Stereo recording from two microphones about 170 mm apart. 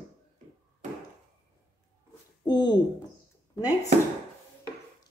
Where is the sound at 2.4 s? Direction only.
25° left (ahead or behind).